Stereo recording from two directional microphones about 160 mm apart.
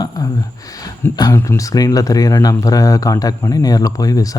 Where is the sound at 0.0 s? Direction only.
20° left (ahead or behind).